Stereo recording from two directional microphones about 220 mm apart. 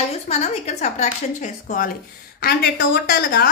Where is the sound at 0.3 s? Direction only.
30° left (ahead or behind).